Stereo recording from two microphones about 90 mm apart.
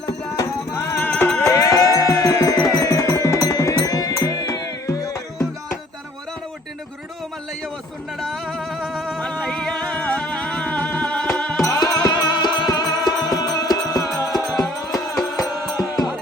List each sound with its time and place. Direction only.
0.0 s music: 40° left (ahead or behind)
0.8 s music: 20° left (ahead or behind)
1.4 s music: 35° left (ahead or behind)
8.2 s music: 5° left (ahead or behind)
11.6 s music: 40° left (ahead or behind)